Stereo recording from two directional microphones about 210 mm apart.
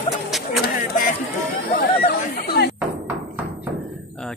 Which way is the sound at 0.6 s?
40° left (ahead or behind).